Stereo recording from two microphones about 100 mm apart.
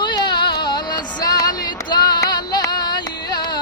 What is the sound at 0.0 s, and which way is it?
Music, 50° left (ahead or behind).